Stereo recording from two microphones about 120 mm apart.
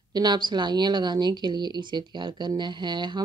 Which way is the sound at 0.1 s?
35° right (ahead or behind).